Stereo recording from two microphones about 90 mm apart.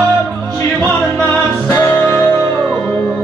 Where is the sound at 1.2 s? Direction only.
30° left (ahead or behind).